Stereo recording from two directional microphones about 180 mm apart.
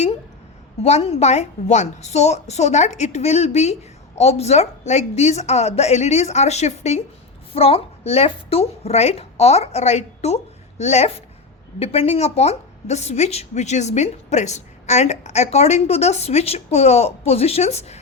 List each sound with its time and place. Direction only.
0.8 s a woman's voice: 35° left (ahead or behind)